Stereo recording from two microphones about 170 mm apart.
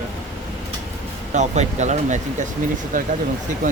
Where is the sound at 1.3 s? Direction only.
45° right (ahead or behind).